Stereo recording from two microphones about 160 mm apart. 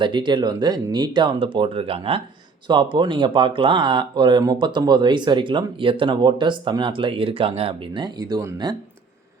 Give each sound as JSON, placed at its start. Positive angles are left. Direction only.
{"t": 0.0, "sound": "speech", "side_deg": -30}